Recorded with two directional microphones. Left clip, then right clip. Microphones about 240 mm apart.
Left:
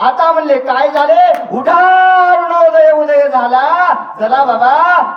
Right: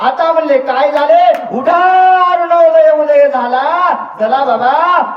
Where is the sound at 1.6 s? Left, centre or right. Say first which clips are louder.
Even; left.